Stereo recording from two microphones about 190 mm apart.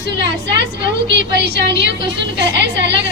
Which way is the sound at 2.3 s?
65° right (ahead or behind).